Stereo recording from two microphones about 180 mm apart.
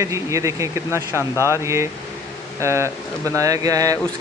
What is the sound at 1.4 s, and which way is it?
Speech, 15° right (ahead or behind).